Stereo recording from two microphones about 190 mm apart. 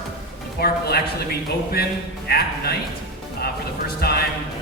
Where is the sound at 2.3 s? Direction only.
55° left (ahead or behind).